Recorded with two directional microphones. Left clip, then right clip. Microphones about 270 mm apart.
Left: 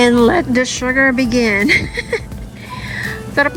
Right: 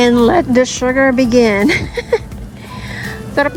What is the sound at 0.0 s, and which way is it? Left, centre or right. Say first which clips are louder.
A woman's voice: right 1 dB; centre.